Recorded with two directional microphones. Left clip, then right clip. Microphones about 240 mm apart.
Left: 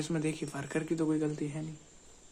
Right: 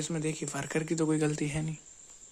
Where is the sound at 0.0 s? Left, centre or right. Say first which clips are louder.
Even; centre; by 1.6 s right.